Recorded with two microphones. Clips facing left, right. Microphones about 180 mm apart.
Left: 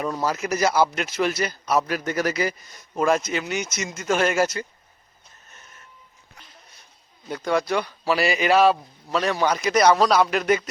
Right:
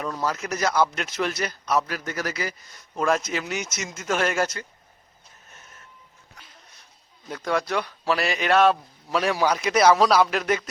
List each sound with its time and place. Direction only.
0.0 s speech: 10° left (ahead or behind)
1.9 s a man's voice: 20° left (ahead or behind)
2.9 s speech: centre (ahead or behind)
7.3 s speech: centre (ahead or behind)